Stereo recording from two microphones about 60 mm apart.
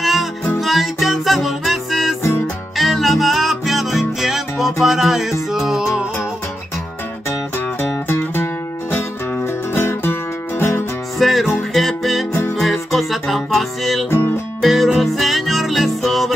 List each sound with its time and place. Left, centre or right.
0.0 s music: centre
9.5 s music: left
11.1 s music: centre